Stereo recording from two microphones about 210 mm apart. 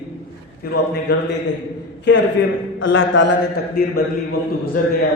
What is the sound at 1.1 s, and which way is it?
Speech, 50° left (ahead or behind).